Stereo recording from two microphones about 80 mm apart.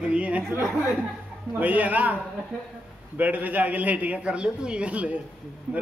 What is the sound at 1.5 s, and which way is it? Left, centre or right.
A man's voice, centre.